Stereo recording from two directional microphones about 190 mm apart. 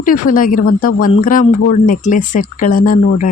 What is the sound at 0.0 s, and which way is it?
Speech, 45° left (ahead or behind).